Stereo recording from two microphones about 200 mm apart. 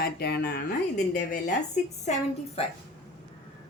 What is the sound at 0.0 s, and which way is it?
Speech, 50° left (ahead or behind).